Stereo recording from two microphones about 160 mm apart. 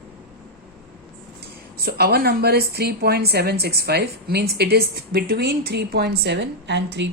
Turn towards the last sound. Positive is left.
turn(degrees=-90)